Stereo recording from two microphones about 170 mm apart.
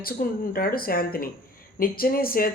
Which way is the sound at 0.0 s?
60° left (ahead or behind).